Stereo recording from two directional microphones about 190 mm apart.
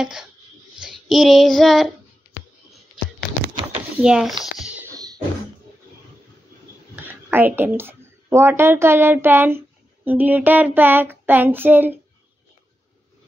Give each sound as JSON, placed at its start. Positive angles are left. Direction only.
{"t": 0.0, "sound": "speech", "side_deg": 0}
{"t": 0.7, "sound": "child singing", "side_deg": 0}
{"t": 4.0, "sound": "speech", "side_deg": -5}
{"t": 4.6, "sound": "a sound", "side_deg": -10}
{"t": 4.9, "sound": "a sound", "side_deg": -20}
{"t": 7.1, "sound": "a woman's voice", "side_deg": -10}
{"t": 10.0, "sound": "child singing", "side_deg": -10}